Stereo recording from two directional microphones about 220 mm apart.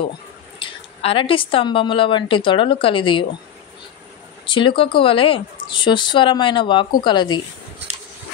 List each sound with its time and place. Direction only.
0.6 s a woman's voice: 25° left (ahead or behind)
4.5 s a woman's voice: 20° left (ahead or behind)